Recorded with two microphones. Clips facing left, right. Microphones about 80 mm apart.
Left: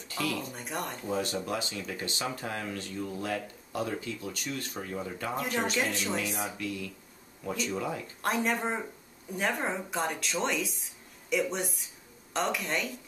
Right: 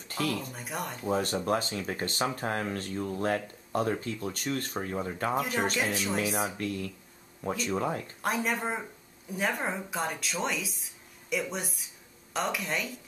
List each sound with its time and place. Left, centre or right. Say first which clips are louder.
0.1 s speech: right 2 dB; right
0.4 s speech: even; centre
1.1 s speech: right 4 dB; right
5.3 s speech: right 1 dB; centre
6.1 s speech: right 3 dB; right
8.2 s speech: left 2 dB; centre